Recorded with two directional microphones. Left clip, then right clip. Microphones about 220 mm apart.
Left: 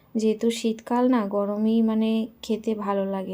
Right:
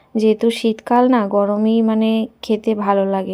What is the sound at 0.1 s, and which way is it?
A woman's voice, 25° right (ahead or behind).